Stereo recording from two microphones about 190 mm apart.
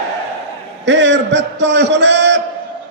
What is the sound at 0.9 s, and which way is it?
Speech, 70° right (ahead or behind).